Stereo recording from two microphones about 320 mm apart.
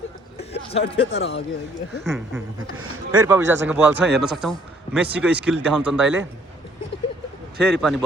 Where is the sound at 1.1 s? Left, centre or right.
Left.